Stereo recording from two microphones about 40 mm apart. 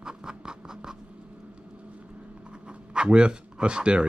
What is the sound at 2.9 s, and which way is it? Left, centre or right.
Speech, right.